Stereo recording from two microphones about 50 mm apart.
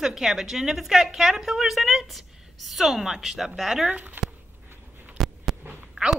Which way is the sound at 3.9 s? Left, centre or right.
Right.